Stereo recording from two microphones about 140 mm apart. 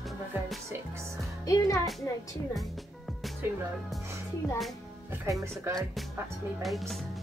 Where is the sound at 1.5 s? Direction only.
25° left (ahead or behind).